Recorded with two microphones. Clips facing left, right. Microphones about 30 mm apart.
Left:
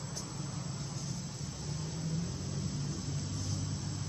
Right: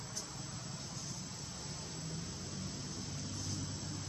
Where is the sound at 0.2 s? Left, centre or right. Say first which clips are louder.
Left 4 dB; centre.